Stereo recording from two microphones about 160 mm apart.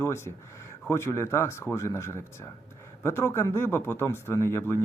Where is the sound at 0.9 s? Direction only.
15° left (ahead or behind).